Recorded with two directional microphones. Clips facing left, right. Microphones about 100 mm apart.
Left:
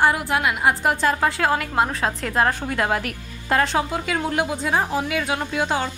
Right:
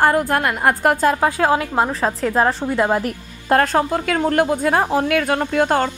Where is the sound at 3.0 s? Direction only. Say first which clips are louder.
Right 5 dB; 45° right (ahead or behind).